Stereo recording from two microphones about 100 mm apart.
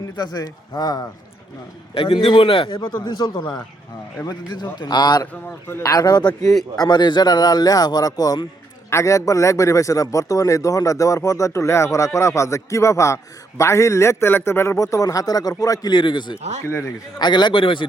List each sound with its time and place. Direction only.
0.2 s a man's voice: 40° left (ahead or behind)
2.0 s speech: 65° left (ahead or behind)
2.7 s a man's voice: 50° left (ahead or behind)
5.3 s a man's voice: 20° left (ahead or behind)
5.8 s a man's voice: 40° left (ahead or behind)
8.9 s a man's voice: 30° left (ahead or behind); by 17.8 s 55° left (ahead or behind)